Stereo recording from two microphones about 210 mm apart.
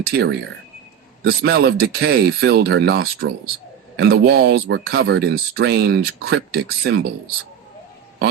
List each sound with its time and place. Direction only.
0.0 s speech: 50° right (ahead or behind)